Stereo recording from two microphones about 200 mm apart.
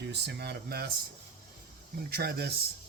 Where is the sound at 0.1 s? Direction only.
55° right (ahead or behind).